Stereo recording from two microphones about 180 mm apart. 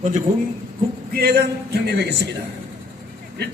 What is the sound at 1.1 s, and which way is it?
A man's voice, 60° right (ahead or behind).